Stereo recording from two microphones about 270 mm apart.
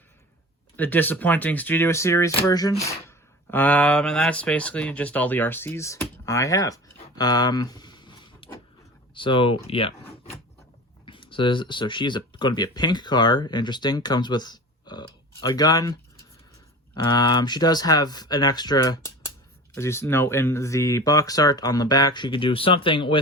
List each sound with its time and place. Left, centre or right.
0.8 s speech: centre
7.2 s a sound: centre
9.1 s speech: centre